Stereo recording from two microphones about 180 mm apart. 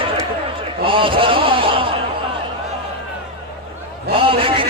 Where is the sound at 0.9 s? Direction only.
30° right (ahead or behind).